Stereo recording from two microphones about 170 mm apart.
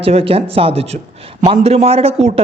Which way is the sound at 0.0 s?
35° right (ahead or behind).